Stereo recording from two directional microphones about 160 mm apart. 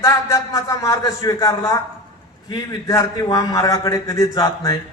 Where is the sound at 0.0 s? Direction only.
20° left (ahead or behind).